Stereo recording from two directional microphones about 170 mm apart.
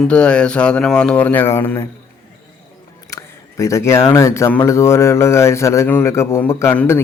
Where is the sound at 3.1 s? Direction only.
20° left (ahead or behind).